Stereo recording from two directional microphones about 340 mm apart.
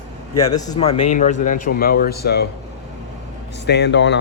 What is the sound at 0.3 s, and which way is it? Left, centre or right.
A man's voice, centre.